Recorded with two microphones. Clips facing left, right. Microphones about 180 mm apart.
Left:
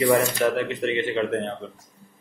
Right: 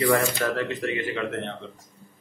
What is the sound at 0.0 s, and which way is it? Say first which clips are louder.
Speech: left 3 dB; 20° left (ahead or behind).